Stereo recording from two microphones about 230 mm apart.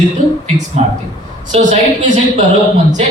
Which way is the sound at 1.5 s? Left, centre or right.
Right.